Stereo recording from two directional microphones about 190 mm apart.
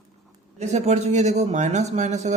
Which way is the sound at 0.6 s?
35° right (ahead or behind).